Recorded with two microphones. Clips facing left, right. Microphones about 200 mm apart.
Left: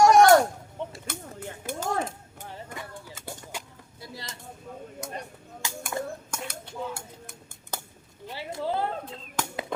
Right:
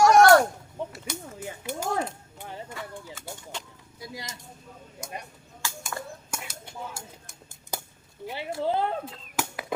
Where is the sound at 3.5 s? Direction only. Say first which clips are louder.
Even; 10° left (ahead or behind).